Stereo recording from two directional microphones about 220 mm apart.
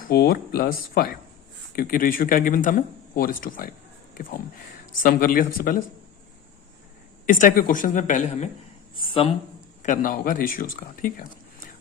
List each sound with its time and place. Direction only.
0.0 s speech: 45° left (ahead or behind)
5.0 s speech: 40° left (ahead or behind)
7.3 s a woman's voice: 35° left (ahead or behind)
9.8 s speech: 35° left (ahead or behind)